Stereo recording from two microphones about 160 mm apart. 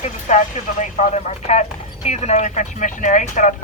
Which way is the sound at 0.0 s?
50° left (ahead or behind).